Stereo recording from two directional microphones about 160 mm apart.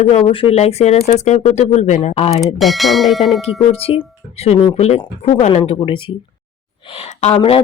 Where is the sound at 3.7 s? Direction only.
40° left (ahead or behind).